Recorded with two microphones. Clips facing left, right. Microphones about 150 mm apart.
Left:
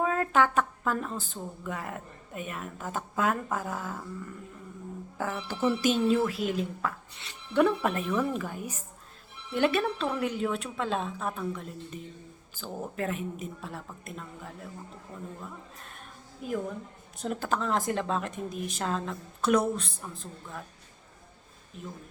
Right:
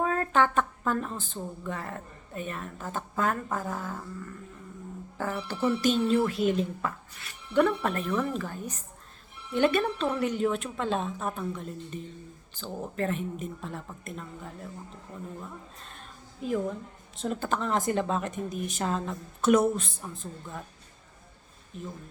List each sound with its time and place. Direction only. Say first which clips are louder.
0.0 s a woman's voice: even; 5° left (ahead or behind)
17.2 s speech: even; centre (ahead or behind)
21.7 s speech: right 3 dB; centre (ahead or behind)